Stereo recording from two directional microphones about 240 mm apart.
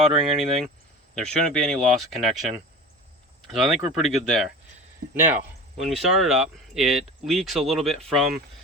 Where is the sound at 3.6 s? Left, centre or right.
Centre.